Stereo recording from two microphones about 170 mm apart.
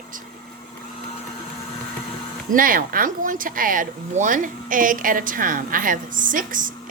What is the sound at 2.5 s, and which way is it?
Speech, 55° right (ahead or behind).